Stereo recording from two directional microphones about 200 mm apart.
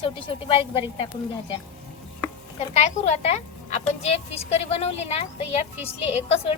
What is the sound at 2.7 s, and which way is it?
Speech, 35° left (ahead or behind).